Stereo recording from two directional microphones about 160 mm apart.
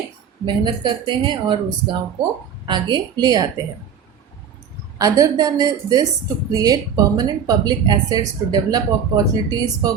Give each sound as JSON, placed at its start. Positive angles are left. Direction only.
{"t": 0.4, "sound": "speech", "side_deg": -30}
{"t": 4.9, "sound": "speech", "side_deg": -20}